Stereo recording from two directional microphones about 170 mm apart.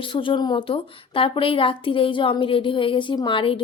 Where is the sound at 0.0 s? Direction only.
30° left (ahead or behind).